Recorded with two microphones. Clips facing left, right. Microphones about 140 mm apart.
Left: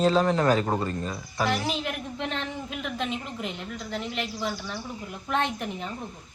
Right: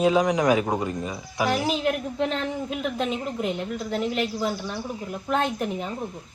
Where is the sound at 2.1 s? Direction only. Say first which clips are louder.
Right 6 dB; 35° right (ahead or behind).